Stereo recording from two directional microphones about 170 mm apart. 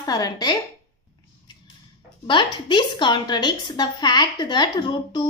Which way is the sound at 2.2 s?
30° left (ahead or behind).